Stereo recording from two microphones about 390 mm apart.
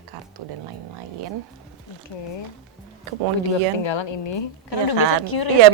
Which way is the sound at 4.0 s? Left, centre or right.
Left.